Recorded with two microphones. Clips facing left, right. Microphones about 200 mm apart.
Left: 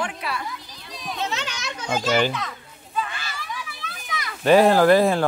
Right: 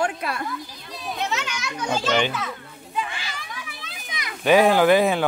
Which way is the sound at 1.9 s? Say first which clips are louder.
Left 1 dB; 10° left (ahead or behind).